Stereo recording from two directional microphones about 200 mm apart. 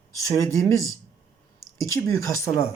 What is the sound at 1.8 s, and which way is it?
Speech, 15° left (ahead or behind).